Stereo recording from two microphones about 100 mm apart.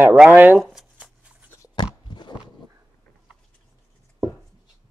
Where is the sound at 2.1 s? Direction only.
45° left (ahead or behind).